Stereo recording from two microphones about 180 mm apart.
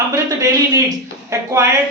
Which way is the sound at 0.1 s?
20° right (ahead or behind).